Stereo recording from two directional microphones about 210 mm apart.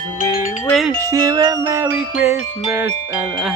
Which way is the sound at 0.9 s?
15° right (ahead or behind).